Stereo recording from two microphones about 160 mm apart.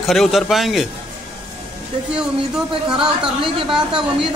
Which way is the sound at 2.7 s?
30° right (ahead or behind).